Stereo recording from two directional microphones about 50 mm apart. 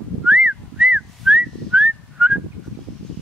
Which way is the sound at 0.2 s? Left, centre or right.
Centre.